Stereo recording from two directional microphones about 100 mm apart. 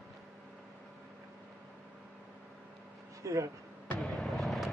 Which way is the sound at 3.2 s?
30° right (ahead or behind).